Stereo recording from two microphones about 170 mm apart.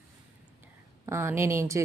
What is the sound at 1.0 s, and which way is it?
Speech, 15° right (ahead or behind).